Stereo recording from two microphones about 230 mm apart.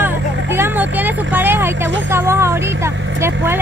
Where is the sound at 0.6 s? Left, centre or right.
Centre.